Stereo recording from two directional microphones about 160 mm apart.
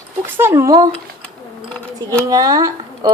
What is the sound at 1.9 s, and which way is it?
Speech, 20° right (ahead or behind).